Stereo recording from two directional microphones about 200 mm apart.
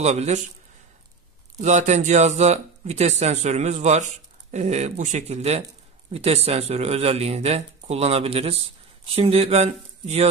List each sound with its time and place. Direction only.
0.0 s speech: 35° right (ahead or behind)
1.6 s speech: 35° right (ahead or behind)